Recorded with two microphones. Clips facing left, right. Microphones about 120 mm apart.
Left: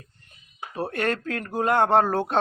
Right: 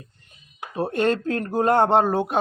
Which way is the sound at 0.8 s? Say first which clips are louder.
Right 5 dB; 25° right (ahead or behind).